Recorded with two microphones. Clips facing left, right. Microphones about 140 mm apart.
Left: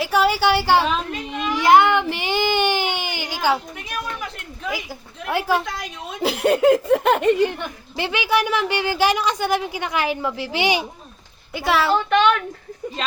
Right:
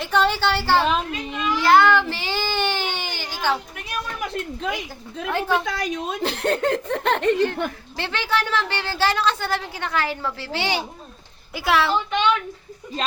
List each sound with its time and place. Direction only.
0.0 s a woman's voice: 10° left (ahead or behind)
1.5 s baby cry: 15° left (ahead or behind)
5.3 s a woman's voice: 10° left (ahead or behind)
5.6 s a woman's voice: 85° right
6.2 s a woman's voice: 10° left (ahead or behind)
11.5 s a woman's voice: centre (ahead or behind)
11.9 s a woman's voice: 60° left (ahead or behind)